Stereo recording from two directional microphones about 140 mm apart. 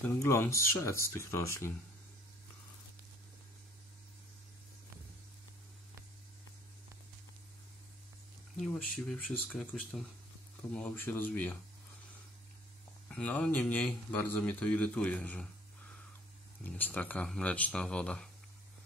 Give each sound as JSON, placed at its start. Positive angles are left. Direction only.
{"t": 0.0, "sound": "speech", "side_deg": 15}
{"t": 8.5, "sound": "speech", "side_deg": 5}
{"t": 13.1, "sound": "speech", "side_deg": 10}
{"t": 16.6, "sound": "speech", "side_deg": 10}